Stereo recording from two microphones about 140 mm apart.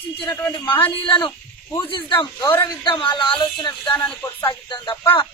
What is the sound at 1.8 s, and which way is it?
Speech, 35° left (ahead or behind).